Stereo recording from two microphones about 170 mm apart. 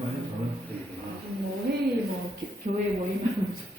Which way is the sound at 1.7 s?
75° right (ahead or behind).